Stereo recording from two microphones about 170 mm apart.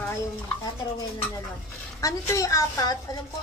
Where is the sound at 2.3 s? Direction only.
20° left (ahead or behind).